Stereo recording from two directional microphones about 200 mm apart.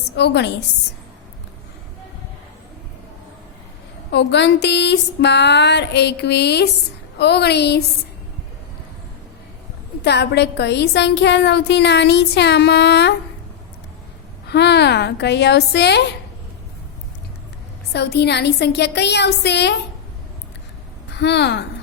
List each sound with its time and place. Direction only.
0.2 s a woman's voice: 60° left (ahead or behind)
4.1 s a woman's voice: 60° left (ahead or behind)
10.0 s a woman's voice: 55° left (ahead or behind)
14.5 s a woman's voice: 55° left (ahead or behind)
17.9 s a woman's voice: 55° left (ahead or behind)
21.2 s a woman's voice: 60° left (ahead or behind)